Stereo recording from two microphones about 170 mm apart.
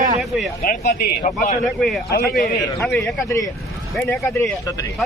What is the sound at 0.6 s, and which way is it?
Speech, 55° left (ahead or behind).